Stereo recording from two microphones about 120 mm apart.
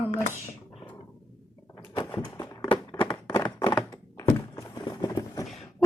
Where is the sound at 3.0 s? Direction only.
25° left (ahead or behind).